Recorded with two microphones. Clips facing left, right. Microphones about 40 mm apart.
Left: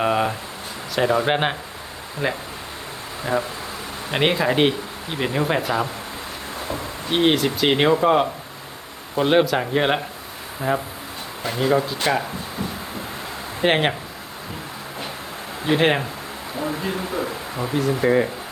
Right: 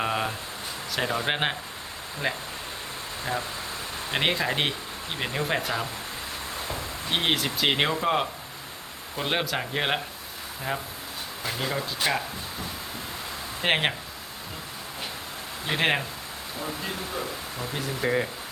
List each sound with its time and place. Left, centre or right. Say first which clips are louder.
0.0 s a sound: left 7 dB; centre
0.9 s speech: left 8 dB; centre
7.1 s speech: left 7 dB; centre
13.6 s speech: left 6 dB; centre
15.6 s speech: left 6 dB; centre
17.7 s speech: left 8 dB; centre